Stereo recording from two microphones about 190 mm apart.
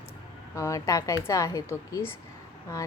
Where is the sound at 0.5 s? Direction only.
15° left (ahead or behind).